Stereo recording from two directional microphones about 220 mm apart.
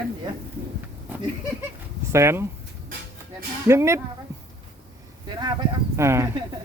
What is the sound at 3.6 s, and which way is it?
Speech, 15° right (ahead or behind).